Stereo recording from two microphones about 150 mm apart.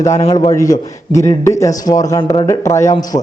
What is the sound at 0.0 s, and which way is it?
A man's voice, 20° left (ahead or behind).